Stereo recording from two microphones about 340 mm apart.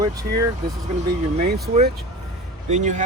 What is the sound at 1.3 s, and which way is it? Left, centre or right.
Speech, right.